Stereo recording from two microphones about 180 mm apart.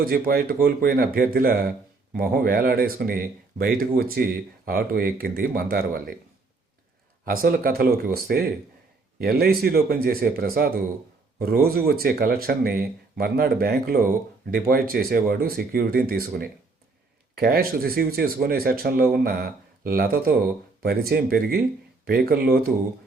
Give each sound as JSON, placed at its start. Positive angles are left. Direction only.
{"t": 0.0, "sound": "speech", "side_deg": -55}
{"t": 7.3, "sound": "speech", "side_deg": -55}